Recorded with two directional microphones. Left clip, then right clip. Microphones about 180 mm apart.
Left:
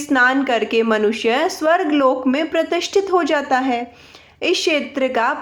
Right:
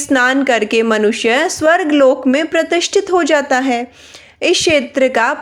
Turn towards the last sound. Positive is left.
turn(degrees=-35)  # may be behind; listen again after turning